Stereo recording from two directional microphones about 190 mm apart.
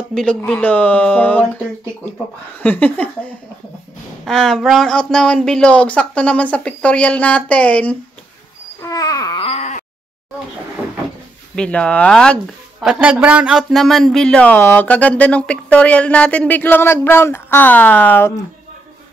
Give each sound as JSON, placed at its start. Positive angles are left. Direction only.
{"t": 0.1, "sound": "speech", "side_deg": 5}
{"t": 2.6, "sound": "speech", "side_deg": 10}
{"t": 4.3, "sound": "speech", "side_deg": 0}
{"t": 8.8, "sound": "a sound", "side_deg": 20}
{"t": 11.5, "sound": "speech", "side_deg": 5}
{"t": 12.8, "sound": "speech", "side_deg": -5}